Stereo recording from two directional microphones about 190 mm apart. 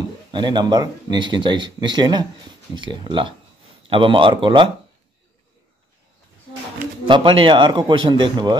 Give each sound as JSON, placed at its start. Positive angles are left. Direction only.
{"t": 0.3, "sound": "speech", "side_deg": -25}
{"t": 7.1, "sound": "speech", "side_deg": -25}